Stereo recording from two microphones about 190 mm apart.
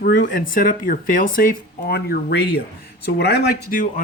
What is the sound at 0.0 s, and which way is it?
Speech, 50° left (ahead or behind).